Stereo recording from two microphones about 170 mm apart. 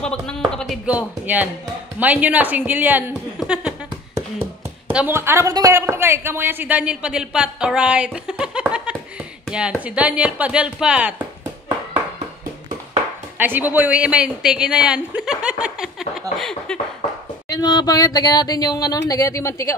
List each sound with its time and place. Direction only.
0.0 s a sound: 5° left (ahead or behind)
0.6 s speech: 5° right (ahead or behind)
3.3 s a sound: 5° right (ahead or behind)
4.9 s speech: 10° right (ahead or behind)
13.4 s speech: 10° right (ahead or behind)
17.5 s speech: 25° left (ahead or behind)